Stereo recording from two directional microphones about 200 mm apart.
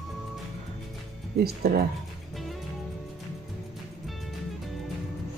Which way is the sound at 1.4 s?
50° right (ahead or behind).